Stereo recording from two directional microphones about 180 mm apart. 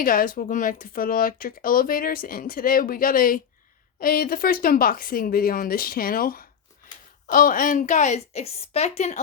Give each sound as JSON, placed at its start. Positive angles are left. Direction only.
{"t": 0.0, "sound": "a woman's voice", "side_deg": 50}